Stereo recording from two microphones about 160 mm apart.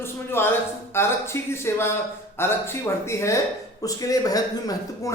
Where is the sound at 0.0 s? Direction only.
15° left (ahead or behind).